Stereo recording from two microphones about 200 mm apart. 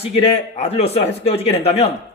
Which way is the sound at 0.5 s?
30° left (ahead or behind).